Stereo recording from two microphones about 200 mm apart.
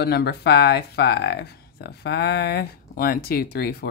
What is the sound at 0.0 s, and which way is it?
Speech, 55° left (ahead or behind).